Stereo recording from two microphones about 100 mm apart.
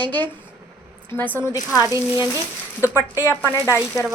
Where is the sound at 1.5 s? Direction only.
35° left (ahead or behind).